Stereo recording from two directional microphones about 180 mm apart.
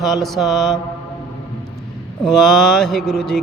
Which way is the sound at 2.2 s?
Centre (ahead or behind).